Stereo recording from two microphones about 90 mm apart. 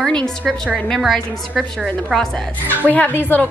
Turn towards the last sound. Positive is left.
turn(degrees=20)  # may be behind; listen again after turning